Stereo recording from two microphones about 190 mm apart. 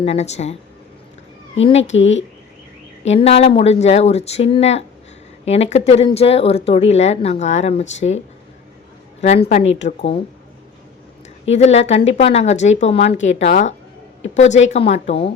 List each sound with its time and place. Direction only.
0.0 s speech: 35° left (ahead or behind)
1.5 s speech: 35° left (ahead or behind)
1.8 s speech: 75° left (ahead or behind)
3.1 s speech: 30° left (ahead or behind)
9.5 s speech: 35° left (ahead or behind)
11.4 s speech: 35° left (ahead or behind)